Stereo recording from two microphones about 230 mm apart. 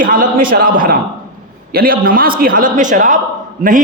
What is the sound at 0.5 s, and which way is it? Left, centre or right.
A man's voice, right.